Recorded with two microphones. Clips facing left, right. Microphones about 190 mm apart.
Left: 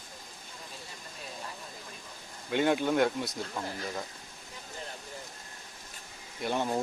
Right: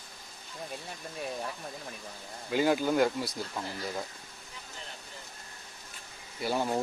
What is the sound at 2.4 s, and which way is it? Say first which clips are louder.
Speech: even; centre (ahead or behind).